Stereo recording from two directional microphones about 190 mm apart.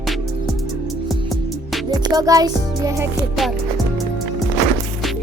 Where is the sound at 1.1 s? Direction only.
Centre (ahead or behind).